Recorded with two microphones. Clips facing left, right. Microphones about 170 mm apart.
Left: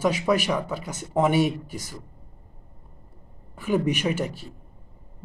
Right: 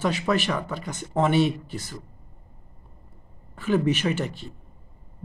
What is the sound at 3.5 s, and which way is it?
Speech, 10° left (ahead or behind).